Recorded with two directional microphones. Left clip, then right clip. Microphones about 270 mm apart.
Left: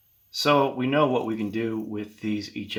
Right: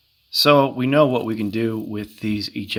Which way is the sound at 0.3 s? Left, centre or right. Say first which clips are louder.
Right 6 dB; right.